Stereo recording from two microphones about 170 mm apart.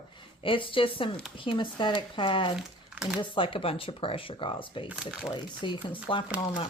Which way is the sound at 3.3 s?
30° left (ahead or behind).